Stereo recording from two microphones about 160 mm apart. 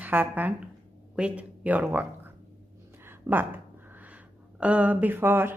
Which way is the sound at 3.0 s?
15° right (ahead or behind).